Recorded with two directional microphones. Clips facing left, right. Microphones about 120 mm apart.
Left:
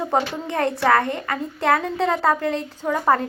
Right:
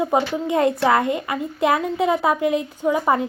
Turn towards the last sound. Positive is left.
turn(degrees=-10)  # may be behind; listen again after turning